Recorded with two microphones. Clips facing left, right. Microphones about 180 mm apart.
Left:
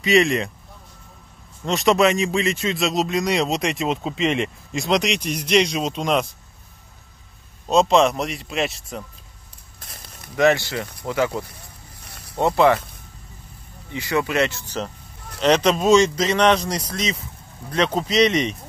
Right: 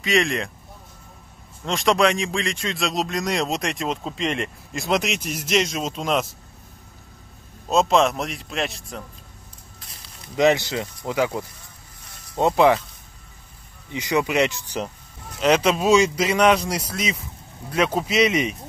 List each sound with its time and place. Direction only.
0.0 s a man's voice: centre (ahead or behind)
1.6 s a man's voice: centre (ahead or behind)
7.7 s a man's voice: centre (ahead or behind)
9.8 s a sound: 50° left (ahead or behind)
10.3 s a man's voice: 20° right (ahead or behind)
13.9 s a man's voice: 15° right (ahead or behind)